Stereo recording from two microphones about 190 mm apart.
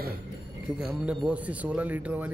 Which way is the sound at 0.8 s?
5° right (ahead or behind).